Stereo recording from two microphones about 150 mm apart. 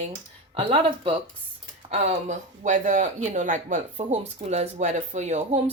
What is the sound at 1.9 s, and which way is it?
Speech, 50° right (ahead or behind).